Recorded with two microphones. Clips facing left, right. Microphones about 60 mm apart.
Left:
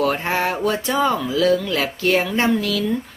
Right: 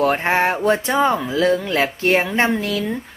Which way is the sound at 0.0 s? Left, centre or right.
Right.